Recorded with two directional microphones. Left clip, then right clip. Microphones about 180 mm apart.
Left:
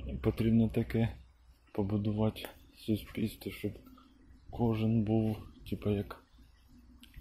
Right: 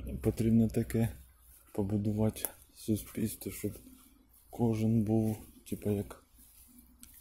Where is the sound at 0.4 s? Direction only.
20° right (ahead or behind).